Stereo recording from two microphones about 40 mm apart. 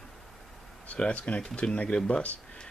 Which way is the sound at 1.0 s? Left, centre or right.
Left.